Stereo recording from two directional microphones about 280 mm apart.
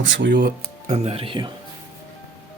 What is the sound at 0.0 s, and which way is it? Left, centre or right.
Speech, right.